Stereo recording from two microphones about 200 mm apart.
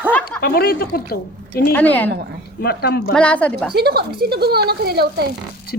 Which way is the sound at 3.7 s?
50° right (ahead or behind).